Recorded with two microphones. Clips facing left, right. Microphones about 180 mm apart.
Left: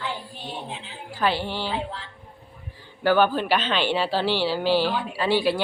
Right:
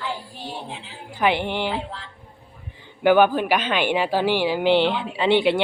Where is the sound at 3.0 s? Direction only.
15° right (ahead or behind).